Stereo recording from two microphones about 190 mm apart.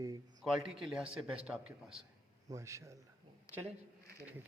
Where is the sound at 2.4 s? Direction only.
15° right (ahead or behind).